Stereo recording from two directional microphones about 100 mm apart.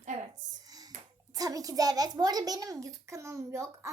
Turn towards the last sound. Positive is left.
turn(degrees=-30)  # may be behind; listen again after turning